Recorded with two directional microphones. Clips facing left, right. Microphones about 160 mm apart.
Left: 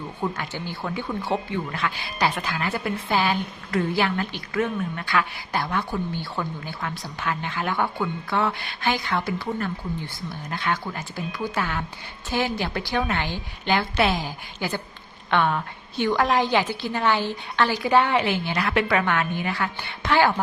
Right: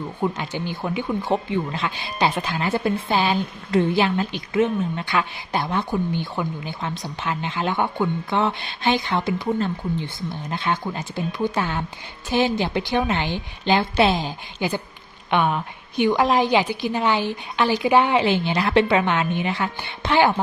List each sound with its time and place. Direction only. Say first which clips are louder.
0.2 s speech: right 4 dB; 15° right (ahead or behind)